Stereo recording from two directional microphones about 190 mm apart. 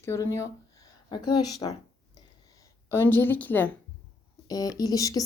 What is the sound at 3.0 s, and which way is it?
Speech, 10° left (ahead or behind).